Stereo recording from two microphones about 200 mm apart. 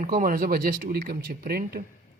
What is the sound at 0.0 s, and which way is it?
Speech, 45° right (ahead or behind).